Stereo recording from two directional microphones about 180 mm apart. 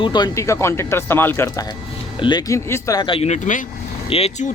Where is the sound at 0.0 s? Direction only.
25° left (ahead or behind).